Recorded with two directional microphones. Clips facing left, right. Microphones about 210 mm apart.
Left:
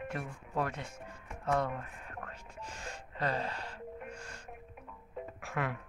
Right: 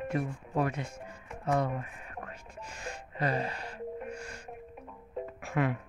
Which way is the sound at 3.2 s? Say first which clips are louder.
Right 3 dB; 10° right (ahead or behind).